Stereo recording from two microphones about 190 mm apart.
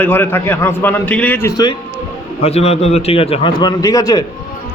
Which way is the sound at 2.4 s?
35° left (ahead or behind).